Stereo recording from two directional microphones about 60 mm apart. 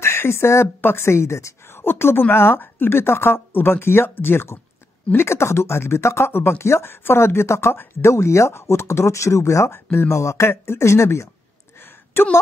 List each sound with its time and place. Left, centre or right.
0.0 s speech: left
12.1 s speech: left